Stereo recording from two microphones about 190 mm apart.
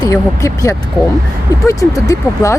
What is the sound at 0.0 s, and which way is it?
Speech, 15° left (ahead or behind).